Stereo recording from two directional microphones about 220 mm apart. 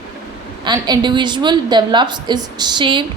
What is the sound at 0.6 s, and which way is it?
A woman's voice, 20° right (ahead or behind).